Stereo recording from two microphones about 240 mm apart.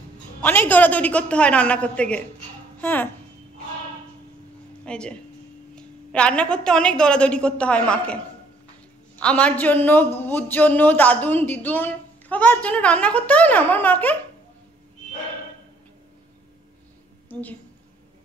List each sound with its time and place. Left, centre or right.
0.4 s a woman's voice: centre
4.8 s a woman's voice: centre
9.2 s a man's voice: centre
17.3 s a woman's voice: centre